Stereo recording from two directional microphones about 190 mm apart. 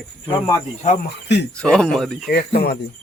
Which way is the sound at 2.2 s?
50° left (ahead or behind).